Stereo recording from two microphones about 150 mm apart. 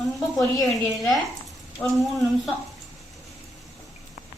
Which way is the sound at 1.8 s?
Centre (ahead or behind).